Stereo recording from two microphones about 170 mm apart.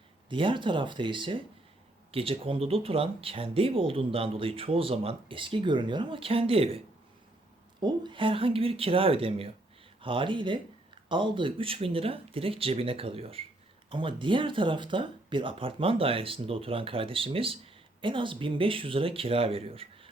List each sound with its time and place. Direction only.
0.3 s speech: 30° right (ahead or behind)